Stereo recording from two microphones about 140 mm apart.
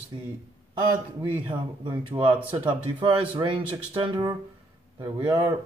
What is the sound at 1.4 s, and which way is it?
A man's voice, 35° right (ahead or behind).